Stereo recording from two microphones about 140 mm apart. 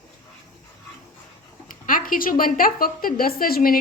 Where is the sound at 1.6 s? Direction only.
75° left (ahead or behind); by 3.8 s 90° left.